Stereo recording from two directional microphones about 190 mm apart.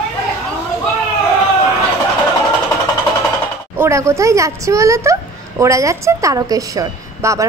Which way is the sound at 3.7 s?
15° right (ahead or behind).